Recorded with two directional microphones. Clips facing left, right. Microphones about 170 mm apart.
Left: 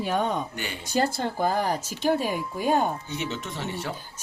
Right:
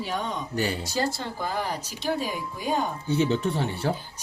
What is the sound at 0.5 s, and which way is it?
Speech, 35° right (ahead or behind).